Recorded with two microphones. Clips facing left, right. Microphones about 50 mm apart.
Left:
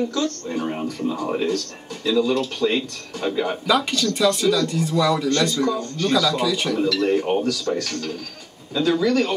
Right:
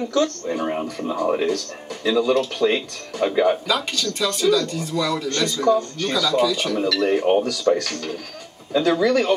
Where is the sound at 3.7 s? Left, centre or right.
Centre.